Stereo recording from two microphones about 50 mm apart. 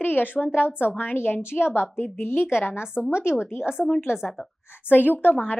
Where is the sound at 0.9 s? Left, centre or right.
Left.